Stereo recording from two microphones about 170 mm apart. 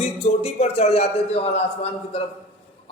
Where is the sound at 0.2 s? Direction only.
35° left (ahead or behind).